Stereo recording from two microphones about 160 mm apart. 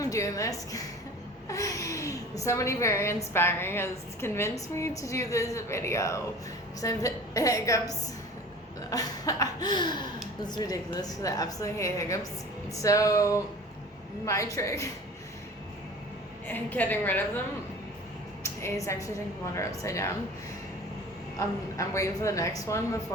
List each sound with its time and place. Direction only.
0.0 s a woman's voice: 20° left (ahead or behind)
16.5 s a woman's voice: 10° left (ahead or behind)
18.4 s a woman's voice: 15° left (ahead or behind)
21.3 s a woman's voice: 20° left (ahead or behind)